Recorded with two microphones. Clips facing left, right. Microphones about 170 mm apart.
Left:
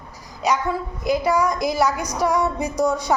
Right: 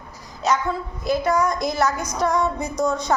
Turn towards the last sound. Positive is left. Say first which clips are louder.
# left 1 dB
turn(degrees=10)  # may be behind; listen again after turning